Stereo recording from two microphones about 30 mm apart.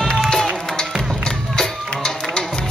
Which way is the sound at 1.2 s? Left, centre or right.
Left.